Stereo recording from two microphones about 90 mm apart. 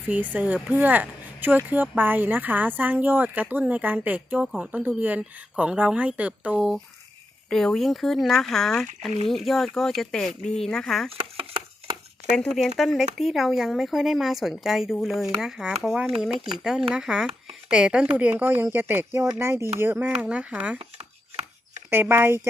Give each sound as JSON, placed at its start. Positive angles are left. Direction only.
{"t": 0.1, "sound": "speech", "side_deg": -15}
{"t": 7.5, "sound": "speech", "side_deg": 5}
{"t": 12.5, "sound": "speech", "side_deg": 0}
{"t": 21.8, "sound": "speech", "side_deg": -25}